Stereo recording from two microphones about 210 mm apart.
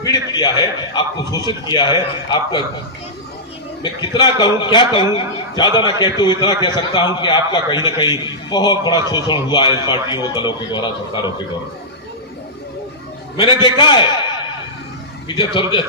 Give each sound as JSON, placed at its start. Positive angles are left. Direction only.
{"t": 0.0, "sound": "a man's voice", "side_deg": 20}
{"t": 4.0, "sound": "a man's voice", "side_deg": 20}
{"t": 13.3, "sound": "a man's voice", "side_deg": 25}
{"t": 15.4, "sound": "a man's voice", "side_deg": 20}